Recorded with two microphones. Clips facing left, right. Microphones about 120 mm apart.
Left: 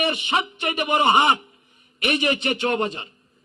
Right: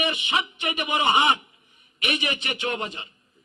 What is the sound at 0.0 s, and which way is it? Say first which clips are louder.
A man's voice: left 3 dB; 35° left (ahead or behind).